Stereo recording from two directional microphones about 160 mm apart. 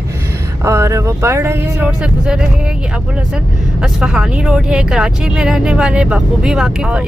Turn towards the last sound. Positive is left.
turn(degrees=-5)  # may be behind; listen again after turning